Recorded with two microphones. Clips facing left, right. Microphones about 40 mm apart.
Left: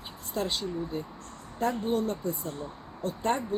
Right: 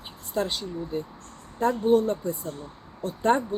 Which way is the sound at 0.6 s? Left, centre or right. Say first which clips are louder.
Even; centre.